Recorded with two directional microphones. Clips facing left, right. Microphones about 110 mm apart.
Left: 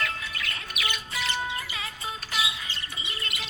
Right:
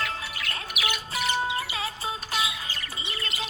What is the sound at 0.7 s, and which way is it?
Bird, 10° right (ahead or behind).